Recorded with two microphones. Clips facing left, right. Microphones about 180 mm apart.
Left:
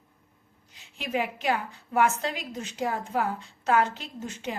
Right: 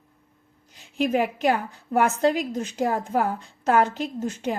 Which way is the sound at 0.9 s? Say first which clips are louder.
Right 7 dB; 50° right (ahead or behind).